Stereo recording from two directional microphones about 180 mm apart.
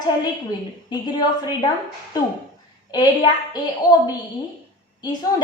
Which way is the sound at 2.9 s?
25° left (ahead or behind).